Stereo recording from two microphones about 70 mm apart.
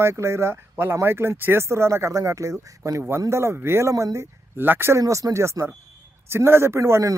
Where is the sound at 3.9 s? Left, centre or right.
Right.